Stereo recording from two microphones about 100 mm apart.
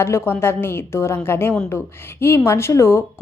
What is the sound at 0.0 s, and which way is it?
A woman's voice, 25° left (ahead or behind).